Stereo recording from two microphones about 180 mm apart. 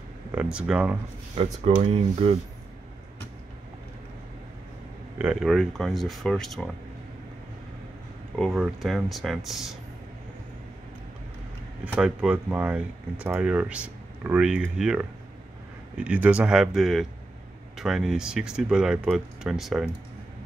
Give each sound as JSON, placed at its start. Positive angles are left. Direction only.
{"t": 0.3, "sound": "speech", "side_deg": -5}
{"t": 1.3, "sound": "speech", "side_deg": -35}
{"t": 5.2, "sound": "speech", "side_deg": -5}
{"t": 8.4, "sound": "speech", "side_deg": 0}
{"t": 11.8, "sound": "speech", "side_deg": -5}